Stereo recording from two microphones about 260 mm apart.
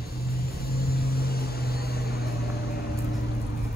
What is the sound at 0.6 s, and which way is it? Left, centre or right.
Vehicle, left.